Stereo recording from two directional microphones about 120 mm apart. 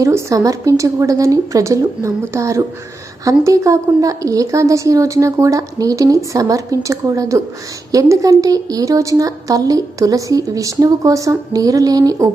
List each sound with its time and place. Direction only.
0.0 s a woman's voice: 25° right (ahead or behind)